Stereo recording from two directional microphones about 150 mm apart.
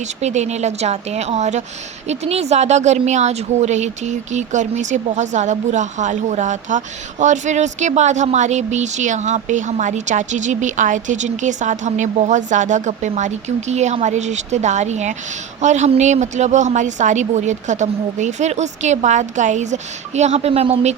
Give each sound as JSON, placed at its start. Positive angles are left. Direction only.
{"t": 0.0, "sound": "speech", "side_deg": -50}